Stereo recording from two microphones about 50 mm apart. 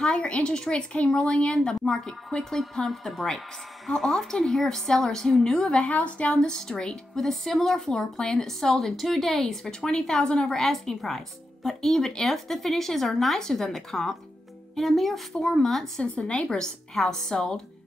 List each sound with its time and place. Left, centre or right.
0.0 s a woman's voice: centre
5.9 s a woman's voice: left
6.4 s speech: centre
16.0 s speech: centre